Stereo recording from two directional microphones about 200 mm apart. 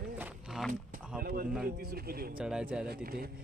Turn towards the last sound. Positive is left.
turn(degrees=-45)  # may be behind; listen again after turning